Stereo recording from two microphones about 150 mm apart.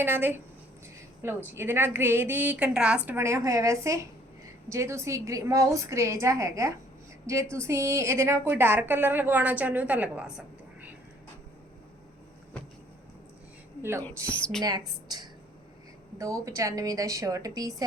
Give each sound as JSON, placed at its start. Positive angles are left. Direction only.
{"t": 0.0, "sound": "a woman's voice", "side_deg": -15}
{"t": 3.1, "sound": "a woman's voice", "side_deg": -15}
{"t": 14.6, "sound": "a woman's voice", "side_deg": -25}